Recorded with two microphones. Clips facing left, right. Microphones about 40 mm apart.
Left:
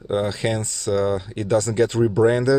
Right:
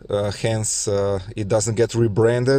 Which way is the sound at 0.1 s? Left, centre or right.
Centre.